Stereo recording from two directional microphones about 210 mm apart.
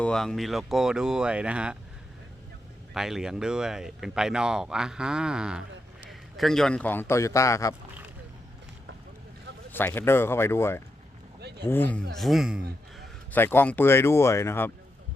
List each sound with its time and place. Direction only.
0.0 s speech: 5° left (ahead or behind)
2.9 s a man's voice: centre (ahead or behind); by 7.8 s 15° left (ahead or behind)
9.7 s speech: 10° left (ahead or behind)
11.3 s a sound: 50° right (ahead or behind)
11.6 s speech: 10° left (ahead or behind)
13.3 s speech: 10° left (ahead or behind)